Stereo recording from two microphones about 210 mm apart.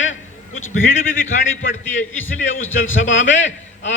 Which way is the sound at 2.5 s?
70° left (ahead or behind).